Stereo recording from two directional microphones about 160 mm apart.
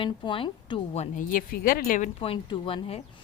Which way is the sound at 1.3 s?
65° left (ahead or behind).